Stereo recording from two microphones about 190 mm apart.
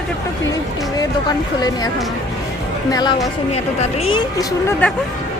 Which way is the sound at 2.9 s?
20° left (ahead or behind).